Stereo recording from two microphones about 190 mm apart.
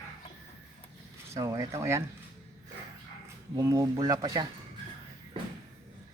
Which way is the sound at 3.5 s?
20° right (ahead or behind).